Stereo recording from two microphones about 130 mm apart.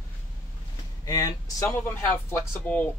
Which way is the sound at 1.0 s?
25° left (ahead or behind).